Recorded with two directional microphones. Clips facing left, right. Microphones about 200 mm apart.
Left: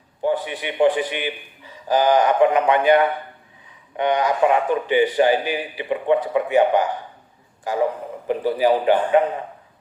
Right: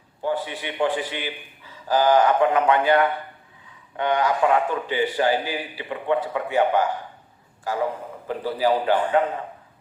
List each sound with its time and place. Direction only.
0.2 s a man's voice: 20° left (ahead or behind)